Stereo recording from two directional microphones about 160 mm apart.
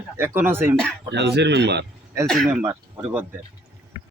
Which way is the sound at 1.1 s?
90° right.